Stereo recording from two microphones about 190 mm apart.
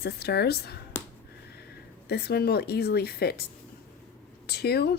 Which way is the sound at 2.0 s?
55° left (ahead or behind).